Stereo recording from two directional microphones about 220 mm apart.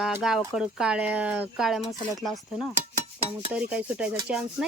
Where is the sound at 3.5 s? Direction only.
5° right (ahead or behind).